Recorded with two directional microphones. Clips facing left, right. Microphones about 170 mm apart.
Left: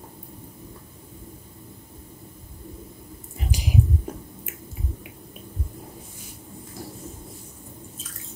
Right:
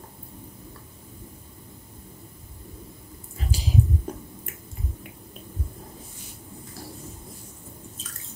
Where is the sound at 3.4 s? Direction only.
15° left (ahead or behind).